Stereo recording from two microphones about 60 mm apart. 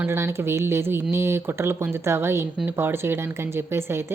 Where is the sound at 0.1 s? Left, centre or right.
Right.